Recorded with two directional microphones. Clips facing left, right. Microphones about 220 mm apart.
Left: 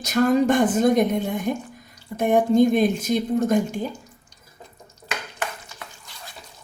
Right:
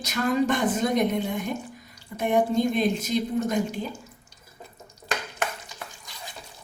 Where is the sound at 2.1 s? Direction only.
50° left (ahead or behind).